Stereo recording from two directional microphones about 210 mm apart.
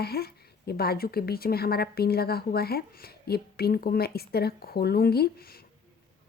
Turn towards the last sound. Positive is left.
turn(degrees=50)  # may be behind; listen again after turning